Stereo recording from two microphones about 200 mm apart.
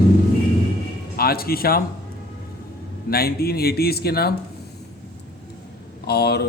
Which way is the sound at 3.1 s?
50° left (ahead or behind).